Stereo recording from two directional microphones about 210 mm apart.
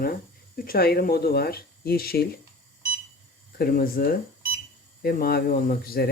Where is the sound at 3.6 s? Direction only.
45° left (ahead or behind).